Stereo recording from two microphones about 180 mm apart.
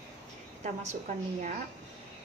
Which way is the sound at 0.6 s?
40° right (ahead or behind).